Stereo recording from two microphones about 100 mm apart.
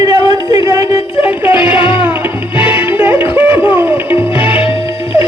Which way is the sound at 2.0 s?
15° right (ahead or behind).